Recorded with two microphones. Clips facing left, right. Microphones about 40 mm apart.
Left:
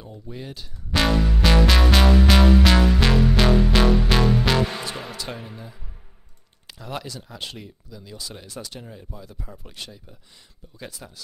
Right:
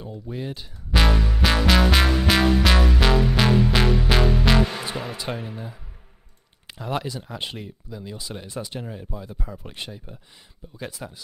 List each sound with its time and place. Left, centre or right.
0.3 s speech: centre
1.0 s music: centre
5.3 s speech: centre
10.8 s speech: centre